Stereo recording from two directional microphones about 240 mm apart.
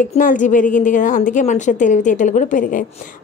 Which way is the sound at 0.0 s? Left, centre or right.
Left.